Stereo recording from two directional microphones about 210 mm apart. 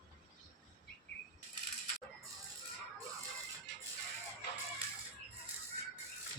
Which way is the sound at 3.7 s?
55° left (ahead or behind).